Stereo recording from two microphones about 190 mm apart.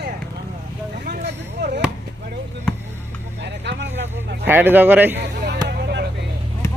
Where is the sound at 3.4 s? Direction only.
65° right (ahead or behind).